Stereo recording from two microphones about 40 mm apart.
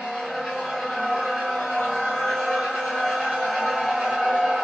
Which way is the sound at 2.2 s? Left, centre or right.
Centre.